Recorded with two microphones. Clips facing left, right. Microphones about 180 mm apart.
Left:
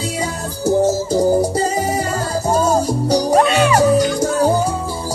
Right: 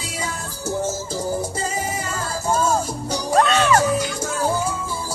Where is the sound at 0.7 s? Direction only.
35° left (ahead or behind).